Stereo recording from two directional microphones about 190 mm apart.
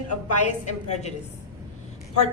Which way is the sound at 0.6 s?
35° left (ahead or behind).